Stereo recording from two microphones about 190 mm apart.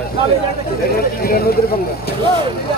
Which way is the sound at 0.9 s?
50° left (ahead or behind).